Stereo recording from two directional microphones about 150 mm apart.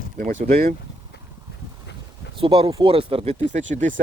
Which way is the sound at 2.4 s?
35° right (ahead or behind).